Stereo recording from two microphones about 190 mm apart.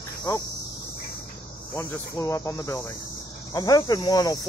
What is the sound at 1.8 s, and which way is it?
Speech, 15° left (ahead or behind).